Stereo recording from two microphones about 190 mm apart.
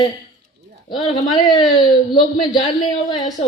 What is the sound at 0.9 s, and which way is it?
A man's voice, 25° left (ahead or behind).